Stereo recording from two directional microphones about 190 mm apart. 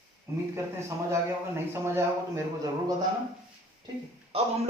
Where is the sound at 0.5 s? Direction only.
15° right (ahead or behind).